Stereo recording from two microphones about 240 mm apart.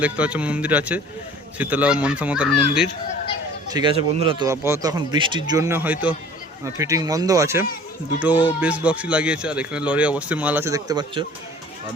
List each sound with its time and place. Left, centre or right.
0.0 s speech: centre
3.7 s a man's voice: centre